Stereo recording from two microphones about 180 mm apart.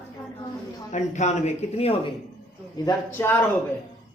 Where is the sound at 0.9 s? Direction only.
40° left (ahead or behind).